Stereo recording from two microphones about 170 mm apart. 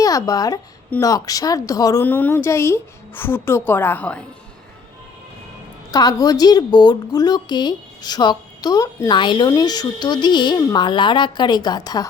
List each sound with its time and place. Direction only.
0.0 s a woman's voice: 20° left (ahead or behind)
5.9 s a woman's voice: 20° left (ahead or behind)